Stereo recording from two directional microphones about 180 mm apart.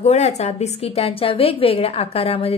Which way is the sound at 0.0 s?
40° left (ahead or behind).